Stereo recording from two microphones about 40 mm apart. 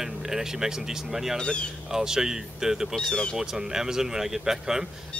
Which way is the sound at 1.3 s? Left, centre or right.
Left.